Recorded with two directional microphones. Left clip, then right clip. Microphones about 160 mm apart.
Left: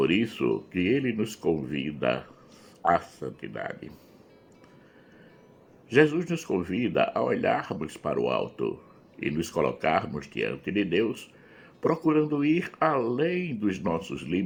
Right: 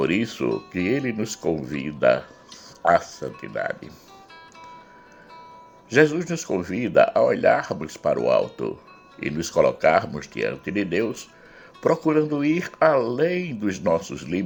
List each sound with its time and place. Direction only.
0.0 s speech: 35° right (ahead or behind)
5.9 s speech: 35° right (ahead or behind)